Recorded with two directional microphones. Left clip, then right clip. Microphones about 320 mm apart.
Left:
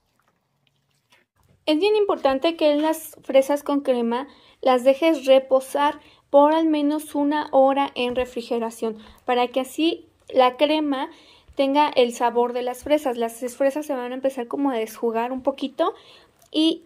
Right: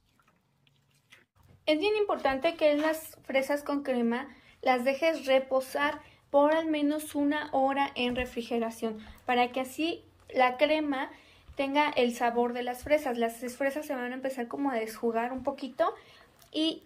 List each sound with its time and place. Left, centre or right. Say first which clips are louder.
1.6 s a woman's voice: left 8 dB; centre